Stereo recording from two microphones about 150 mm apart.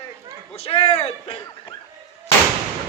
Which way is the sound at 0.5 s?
40° left (ahead or behind).